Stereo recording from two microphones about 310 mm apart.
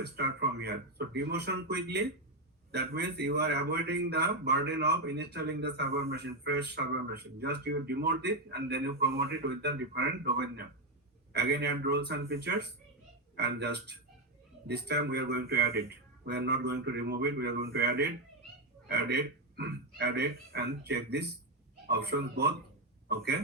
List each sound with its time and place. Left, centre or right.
0.0 s a man's voice: right